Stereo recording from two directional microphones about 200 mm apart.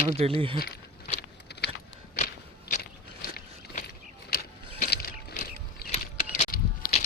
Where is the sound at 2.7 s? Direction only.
45° left (ahead or behind).